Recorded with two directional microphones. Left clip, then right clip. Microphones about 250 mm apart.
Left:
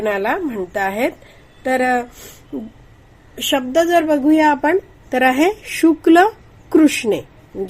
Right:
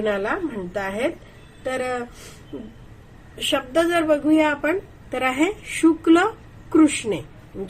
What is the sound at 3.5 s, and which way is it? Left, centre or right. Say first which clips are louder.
Speech: left 5 dB; left.